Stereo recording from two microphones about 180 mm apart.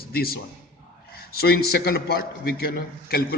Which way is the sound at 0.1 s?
60° left (ahead or behind).